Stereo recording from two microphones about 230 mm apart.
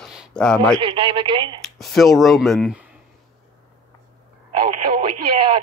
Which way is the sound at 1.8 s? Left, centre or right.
Centre.